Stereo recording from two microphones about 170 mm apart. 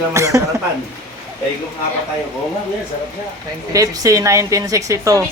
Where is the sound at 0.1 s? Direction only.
20° right (ahead or behind).